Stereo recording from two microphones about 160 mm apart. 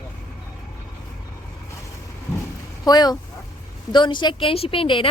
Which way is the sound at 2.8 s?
25° left (ahead or behind).